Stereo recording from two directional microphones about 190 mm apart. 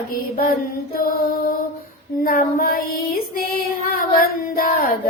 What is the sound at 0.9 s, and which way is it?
Mantra, 50° left (ahead or behind).